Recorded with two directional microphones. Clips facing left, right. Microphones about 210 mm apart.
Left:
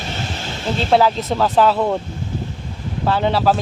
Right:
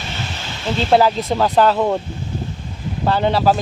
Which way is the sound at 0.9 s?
Centre (ahead or behind).